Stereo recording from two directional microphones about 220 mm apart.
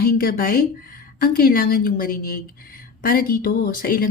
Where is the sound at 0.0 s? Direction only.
45° left (ahead or behind).